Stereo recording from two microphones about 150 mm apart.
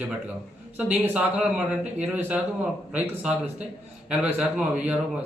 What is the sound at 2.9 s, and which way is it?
A man's voice, 10° right (ahead or behind).